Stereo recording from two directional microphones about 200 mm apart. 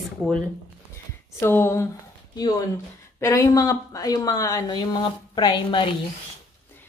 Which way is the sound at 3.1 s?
15° left (ahead or behind).